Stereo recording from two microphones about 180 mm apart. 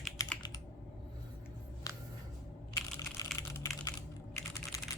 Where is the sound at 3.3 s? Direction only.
15° left (ahead or behind).